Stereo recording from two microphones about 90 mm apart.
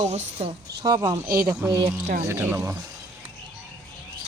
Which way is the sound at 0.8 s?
45° right (ahead or behind).